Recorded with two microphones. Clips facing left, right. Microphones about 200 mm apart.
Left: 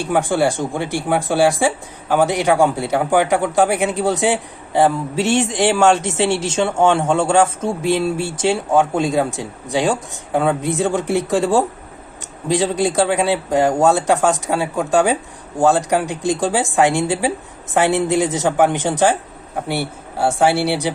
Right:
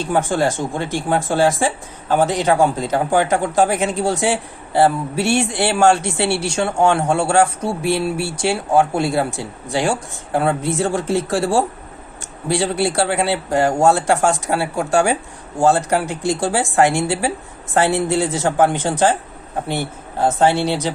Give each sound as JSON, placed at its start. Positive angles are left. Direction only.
{"t": 0.0, "sound": "speech", "side_deg": 15}